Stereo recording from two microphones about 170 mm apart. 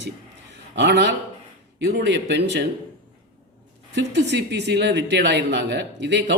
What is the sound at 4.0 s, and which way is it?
Speech, 90° right.